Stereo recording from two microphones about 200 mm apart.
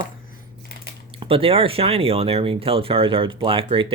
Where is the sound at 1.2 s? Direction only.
30° right (ahead or behind).